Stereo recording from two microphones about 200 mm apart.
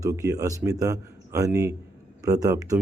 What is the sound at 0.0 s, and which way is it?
A man's voice, 15° right (ahead or behind).